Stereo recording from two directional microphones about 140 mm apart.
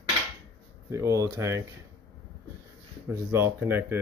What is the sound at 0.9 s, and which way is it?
Speech, 20° right (ahead or behind).